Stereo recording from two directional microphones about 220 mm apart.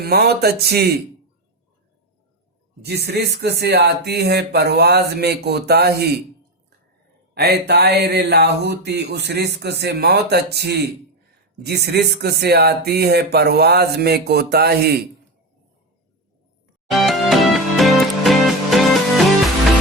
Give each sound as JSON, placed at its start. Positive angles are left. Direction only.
{"t": 0.0, "sound": "speech", "side_deg": -45}
{"t": 2.8, "sound": "speech", "side_deg": -45}
{"t": 7.3, "sound": "speech", "side_deg": -45}
{"t": 16.9, "sound": "music", "side_deg": 0}